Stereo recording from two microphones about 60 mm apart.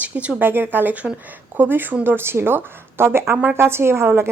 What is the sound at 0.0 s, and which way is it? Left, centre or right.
Speech, right.